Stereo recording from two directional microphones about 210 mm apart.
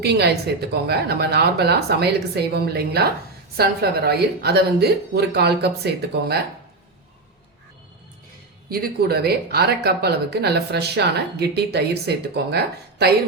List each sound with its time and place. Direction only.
0.0 s speech: 50° right (ahead or behind)
8.7 s speech: 45° right (ahead or behind)